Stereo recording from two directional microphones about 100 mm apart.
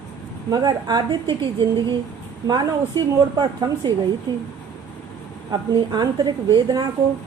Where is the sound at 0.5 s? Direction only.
40° right (ahead or behind).